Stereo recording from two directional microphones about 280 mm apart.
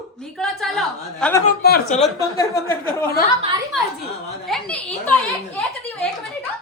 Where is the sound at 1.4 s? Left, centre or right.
Left.